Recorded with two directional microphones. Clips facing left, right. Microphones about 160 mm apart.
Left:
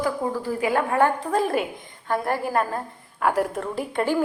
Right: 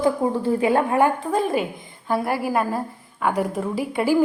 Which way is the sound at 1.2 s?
Centre (ahead or behind).